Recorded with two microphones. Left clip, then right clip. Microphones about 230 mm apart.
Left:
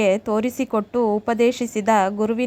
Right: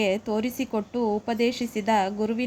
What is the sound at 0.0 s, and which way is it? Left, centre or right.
A woman's voice, left.